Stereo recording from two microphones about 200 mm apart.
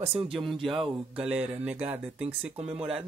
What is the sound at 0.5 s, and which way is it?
Speech, centre (ahead or behind).